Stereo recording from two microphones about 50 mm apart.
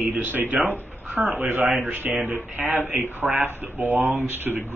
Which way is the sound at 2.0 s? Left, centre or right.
Centre.